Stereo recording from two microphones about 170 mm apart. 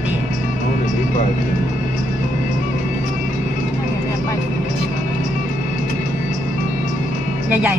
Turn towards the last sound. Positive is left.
turn(degrees=-10)  # may be behind; listen again after turning